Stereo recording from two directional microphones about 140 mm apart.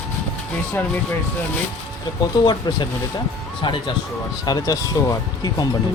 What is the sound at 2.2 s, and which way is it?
Speech, 30° left (ahead or behind).